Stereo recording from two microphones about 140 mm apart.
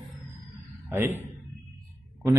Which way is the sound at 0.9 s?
15° right (ahead or behind).